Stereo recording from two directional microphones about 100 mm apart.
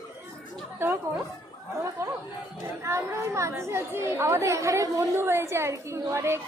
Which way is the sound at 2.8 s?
30° right (ahead or behind).